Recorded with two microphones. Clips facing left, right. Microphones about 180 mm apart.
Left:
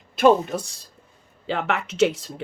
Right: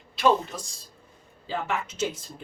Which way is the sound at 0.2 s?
60° left (ahead or behind).